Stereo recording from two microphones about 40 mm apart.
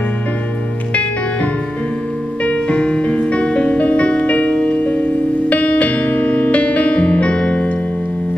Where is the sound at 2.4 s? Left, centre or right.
Left.